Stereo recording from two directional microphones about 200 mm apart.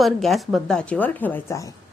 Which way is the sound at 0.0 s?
Centre (ahead or behind).